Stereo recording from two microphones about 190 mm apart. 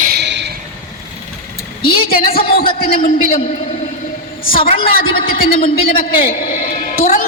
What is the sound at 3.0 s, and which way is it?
Speech, 45° left (ahead or behind).